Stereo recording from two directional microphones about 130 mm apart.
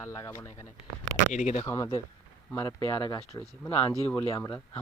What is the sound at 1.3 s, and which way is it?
Speech, 65° left (ahead or behind).